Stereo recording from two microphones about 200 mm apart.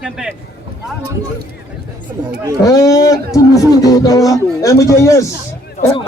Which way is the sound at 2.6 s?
15° left (ahead or behind).